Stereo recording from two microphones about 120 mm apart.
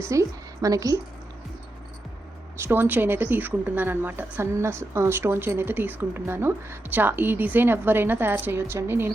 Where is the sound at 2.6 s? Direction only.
15° right (ahead or behind).